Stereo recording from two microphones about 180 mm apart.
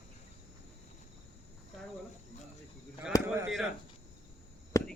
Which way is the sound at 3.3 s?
5° right (ahead or behind).